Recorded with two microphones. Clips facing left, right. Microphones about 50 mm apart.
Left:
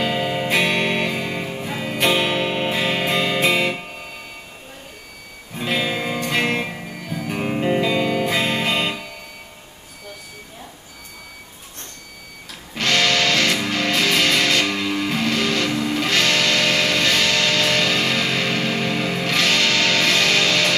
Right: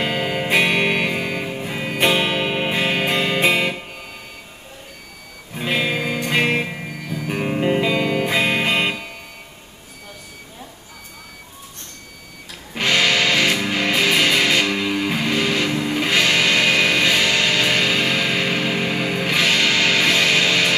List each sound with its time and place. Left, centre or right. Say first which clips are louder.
0.0 s music: even; centre
5.5 s music: right 1 dB; centre
6.9 s music: right 1 dB; right
7.4 s music: right 1 dB; centre
12.7 s music: right 1 dB; centre